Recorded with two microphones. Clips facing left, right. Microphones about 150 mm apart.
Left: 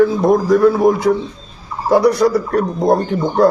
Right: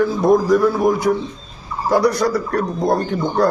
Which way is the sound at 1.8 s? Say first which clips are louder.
Left 4 dB; 25° left (ahead or behind).